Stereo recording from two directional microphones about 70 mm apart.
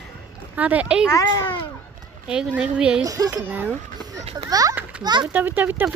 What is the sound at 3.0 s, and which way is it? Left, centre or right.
Speech, right.